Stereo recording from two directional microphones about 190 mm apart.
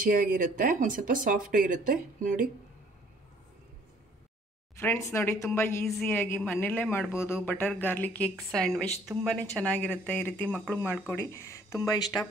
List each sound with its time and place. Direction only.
0.0 s speech: 45° right (ahead or behind)
4.7 s speech: 15° left (ahead or behind)